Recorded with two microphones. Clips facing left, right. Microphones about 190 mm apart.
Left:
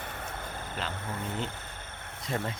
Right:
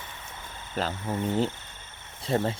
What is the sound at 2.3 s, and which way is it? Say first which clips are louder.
Speech: right 7 dB; 30° right (ahead or behind).